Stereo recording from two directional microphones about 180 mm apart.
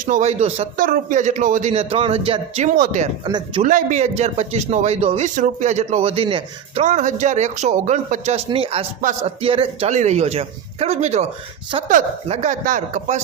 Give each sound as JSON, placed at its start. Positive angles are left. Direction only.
{"t": 0.0, "sound": "a man's voice", "side_deg": -45}
{"t": 0.8, "sound": "a man's voice", "side_deg": -45}
{"t": 2.7, "sound": "speech", "side_deg": -50}
{"t": 3.2, "sound": "a man's voice", "side_deg": -25}
{"t": 3.6, "sound": "a man's voice", "side_deg": -45}
{"t": 6.8, "sound": "a man's voice", "side_deg": -45}
{"t": 9.0, "sound": "speech", "side_deg": -45}
{"t": 9.4, "sound": "a man's voice", "side_deg": -30}